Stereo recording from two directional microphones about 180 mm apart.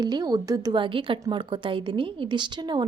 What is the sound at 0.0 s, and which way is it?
A woman's voice, 20° right (ahead or behind).